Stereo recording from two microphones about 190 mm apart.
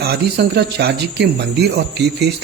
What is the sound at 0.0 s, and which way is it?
Speech, 60° right (ahead or behind).